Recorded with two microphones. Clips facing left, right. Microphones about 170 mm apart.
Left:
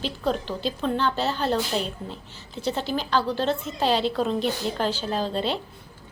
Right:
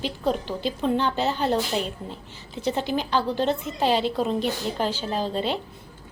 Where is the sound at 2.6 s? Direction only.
15° right (ahead or behind).